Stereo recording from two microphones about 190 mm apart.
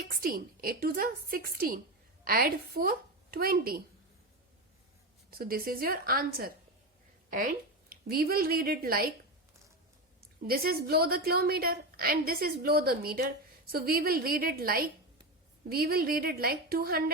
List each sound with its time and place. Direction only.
0.1 s a woman's voice: 50° right (ahead or behind)
5.3 s a woman's voice: 50° right (ahead or behind)
10.4 s a woman's voice: 50° right (ahead or behind)